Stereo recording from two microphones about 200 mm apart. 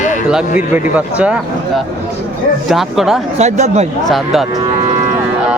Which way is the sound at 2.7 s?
Centre (ahead or behind).